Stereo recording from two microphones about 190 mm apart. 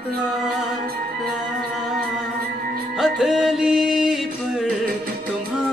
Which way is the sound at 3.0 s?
Centre (ahead or behind).